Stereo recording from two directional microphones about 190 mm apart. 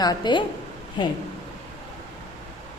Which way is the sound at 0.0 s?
20° left (ahead or behind).